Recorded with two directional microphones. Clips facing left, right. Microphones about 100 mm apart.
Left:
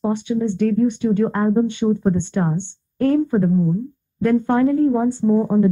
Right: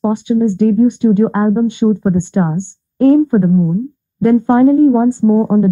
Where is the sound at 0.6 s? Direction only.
25° right (ahead or behind).